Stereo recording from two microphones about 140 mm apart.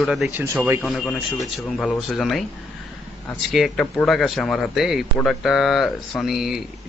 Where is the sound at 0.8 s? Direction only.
5° left (ahead or behind).